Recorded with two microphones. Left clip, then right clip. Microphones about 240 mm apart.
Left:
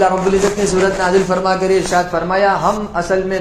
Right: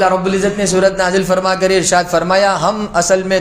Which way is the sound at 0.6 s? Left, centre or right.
Right.